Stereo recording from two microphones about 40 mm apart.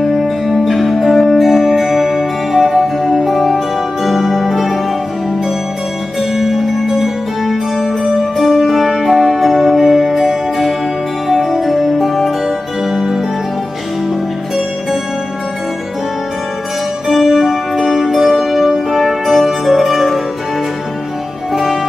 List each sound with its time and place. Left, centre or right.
0.2 s music: centre
0.7 s music: centre
6.3 s music: centre
12.4 s music: centre
17.1 s music: centre